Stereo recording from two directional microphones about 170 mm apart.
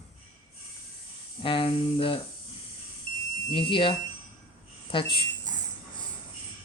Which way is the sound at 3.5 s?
30° left (ahead or behind).